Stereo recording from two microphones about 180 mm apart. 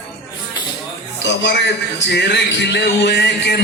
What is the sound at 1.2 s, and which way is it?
A man's voice, 75° left (ahead or behind).